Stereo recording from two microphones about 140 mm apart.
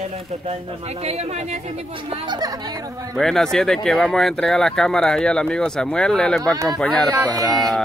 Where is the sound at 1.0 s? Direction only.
50° right (ahead or behind).